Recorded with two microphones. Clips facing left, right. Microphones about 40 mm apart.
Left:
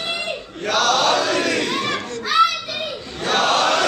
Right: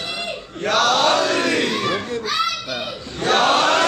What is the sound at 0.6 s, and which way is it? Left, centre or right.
Chant, centre.